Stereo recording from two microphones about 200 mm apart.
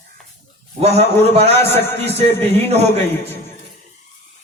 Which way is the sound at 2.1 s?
30° right (ahead or behind).